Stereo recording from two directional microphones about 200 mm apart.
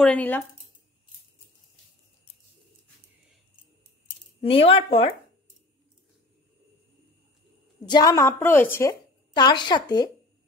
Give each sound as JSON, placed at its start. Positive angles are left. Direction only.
{"t": 0.0, "sound": "a woman's voice", "side_deg": 5}
{"t": 4.4, "sound": "a woman's voice", "side_deg": 30}
{"t": 7.9, "sound": "a woman's voice", "side_deg": 20}
{"t": 9.3, "sound": "a woman's voice", "side_deg": 20}